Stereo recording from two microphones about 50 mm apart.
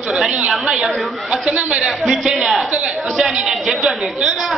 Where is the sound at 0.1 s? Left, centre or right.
Centre.